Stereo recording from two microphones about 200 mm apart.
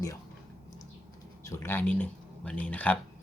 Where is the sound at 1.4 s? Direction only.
15° left (ahead or behind).